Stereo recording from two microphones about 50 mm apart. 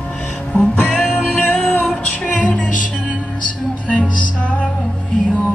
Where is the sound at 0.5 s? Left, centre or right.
Left.